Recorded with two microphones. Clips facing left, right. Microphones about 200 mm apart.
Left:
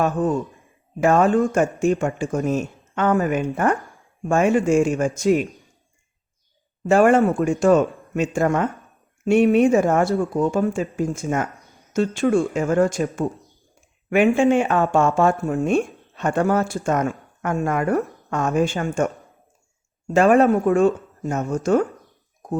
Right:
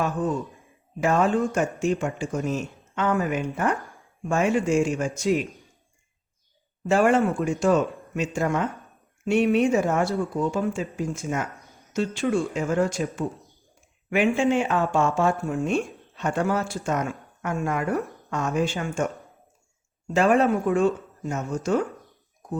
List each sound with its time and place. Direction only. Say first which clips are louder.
0.0 s speech: left 5 dB; 45° left (ahead or behind)
6.8 s speech: left 5 dB; 50° left (ahead or behind)
20.1 s speech: left 5 dB; 50° left (ahead or behind)